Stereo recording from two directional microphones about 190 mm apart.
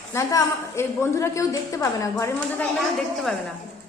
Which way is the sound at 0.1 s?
15° left (ahead or behind).